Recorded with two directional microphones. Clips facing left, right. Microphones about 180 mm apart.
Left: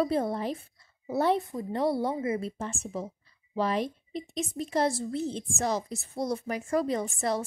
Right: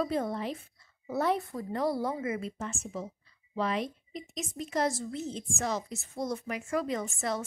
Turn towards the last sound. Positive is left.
turn(degrees=35)  # may be behind; listen again after turning